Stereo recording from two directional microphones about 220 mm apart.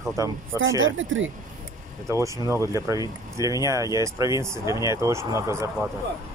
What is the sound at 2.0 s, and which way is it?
Speech, 15° right (ahead or behind).